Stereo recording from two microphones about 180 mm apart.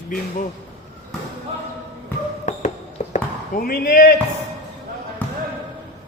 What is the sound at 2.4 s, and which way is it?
Basketball bounce, 40° left (ahead or behind).